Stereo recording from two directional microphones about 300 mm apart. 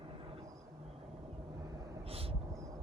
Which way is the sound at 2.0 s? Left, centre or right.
Centre.